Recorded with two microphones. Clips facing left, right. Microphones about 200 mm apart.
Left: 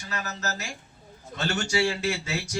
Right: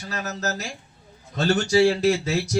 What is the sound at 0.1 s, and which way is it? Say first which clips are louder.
A man's voice: right 4 dB; 35° right (ahead or behind).